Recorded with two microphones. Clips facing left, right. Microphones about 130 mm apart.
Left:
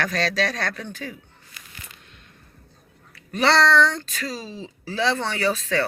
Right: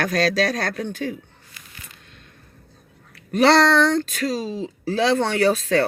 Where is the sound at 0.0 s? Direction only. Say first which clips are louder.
Right 4 dB; 40° right (ahead or behind).